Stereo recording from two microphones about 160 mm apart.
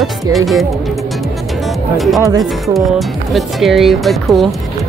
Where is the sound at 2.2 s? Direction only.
25° right (ahead or behind).